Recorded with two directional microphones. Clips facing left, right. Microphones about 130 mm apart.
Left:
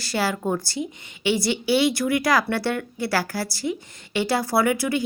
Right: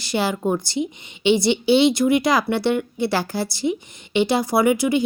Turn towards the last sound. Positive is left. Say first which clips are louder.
# right 4 dB
turn(degrees=-20)  # may be behind; listen again after turning